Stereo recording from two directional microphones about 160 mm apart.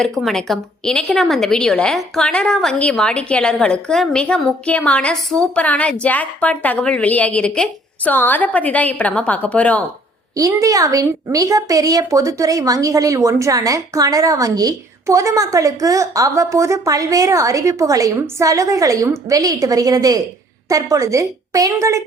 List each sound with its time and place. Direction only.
0.2 s a woman's voice: centre (ahead or behind)
10.3 s a woman's voice: 20° right (ahead or behind)